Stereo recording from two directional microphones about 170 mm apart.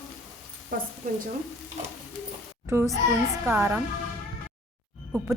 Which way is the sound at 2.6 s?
15° right (ahead or behind).